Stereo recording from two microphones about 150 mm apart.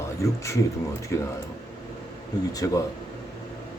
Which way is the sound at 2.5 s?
25° left (ahead or behind).